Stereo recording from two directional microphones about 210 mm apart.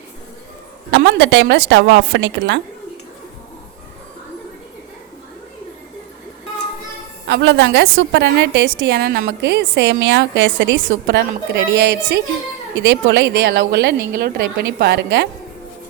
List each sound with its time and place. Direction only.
0.9 s a woman's voice: 60° right (ahead or behind)
7.3 s a woman's voice: 55° right (ahead or behind)